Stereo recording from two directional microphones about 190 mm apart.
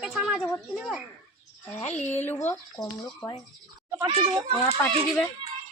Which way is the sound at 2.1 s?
10° left (ahead or behind).